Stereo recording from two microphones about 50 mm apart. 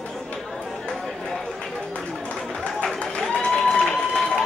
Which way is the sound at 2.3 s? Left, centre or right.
Centre.